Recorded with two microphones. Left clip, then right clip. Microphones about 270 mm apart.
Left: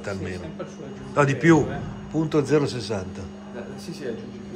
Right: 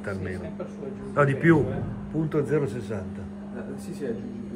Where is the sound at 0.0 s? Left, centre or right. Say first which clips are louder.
Left 2 dB; centre.